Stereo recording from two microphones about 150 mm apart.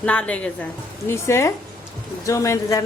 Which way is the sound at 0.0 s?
10° left (ahead or behind).